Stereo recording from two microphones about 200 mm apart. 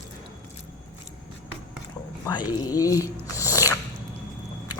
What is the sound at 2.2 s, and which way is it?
Speech, 20° left (ahead or behind).